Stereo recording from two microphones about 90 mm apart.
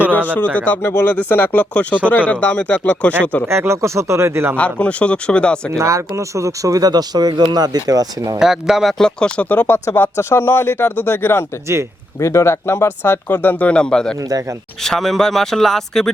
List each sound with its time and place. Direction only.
0.5 s speech: 15° left (ahead or behind)
3.4 s speech: 30° right (ahead or behind)
4.5 s speech: 15° left (ahead or behind)
5.7 s speech: 35° right (ahead or behind)
8.4 s speech: 5° right (ahead or behind)